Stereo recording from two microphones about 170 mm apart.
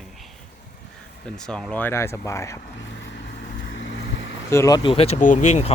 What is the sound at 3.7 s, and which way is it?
Vehicle, 90° left.